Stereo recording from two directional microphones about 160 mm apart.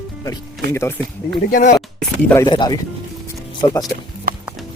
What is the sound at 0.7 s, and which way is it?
Speech, 15° left (ahead or behind).